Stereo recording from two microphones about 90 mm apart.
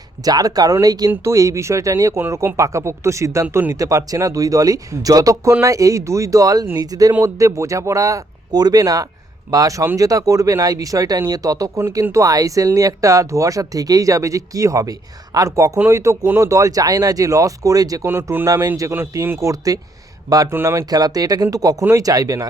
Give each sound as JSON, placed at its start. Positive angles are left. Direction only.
{"t": 0.3, "sound": "speech", "side_deg": -45}
{"t": 1.1, "sound": "speech", "side_deg": -35}
{"t": 11.8, "sound": "speech", "side_deg": -30}
{"t": 18.1, "sound": "speech", "side_deg": -25}
{"t": 18.4, "sound": "speech", "side_deg": -40}
{"t": 20.9, "sound": "speech", "side_deg": -45}